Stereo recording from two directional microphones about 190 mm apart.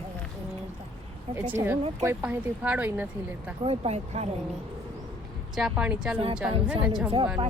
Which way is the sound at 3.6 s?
30° right (ahead or behind).